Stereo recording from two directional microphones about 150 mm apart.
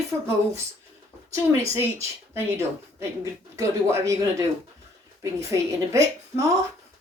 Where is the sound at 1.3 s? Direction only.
20° right (ahead or behind).